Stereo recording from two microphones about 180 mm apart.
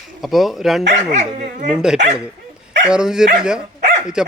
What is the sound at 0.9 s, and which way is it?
Speech, 40° right (ahead or behind).